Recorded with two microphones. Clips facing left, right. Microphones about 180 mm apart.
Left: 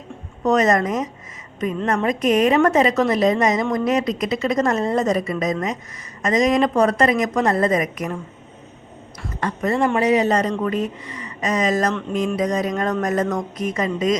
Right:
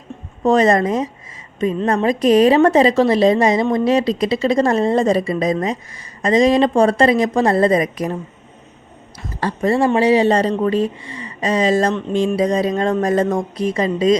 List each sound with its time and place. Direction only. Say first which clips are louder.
0.4 s a woman's voice: right 3 dB; 30° right (ahead or behind)
9.4 s a woman's voice: right 4 dB; 30° right (ahead or behind)